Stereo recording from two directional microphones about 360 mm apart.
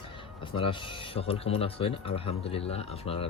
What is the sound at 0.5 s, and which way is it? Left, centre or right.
Speech, centre.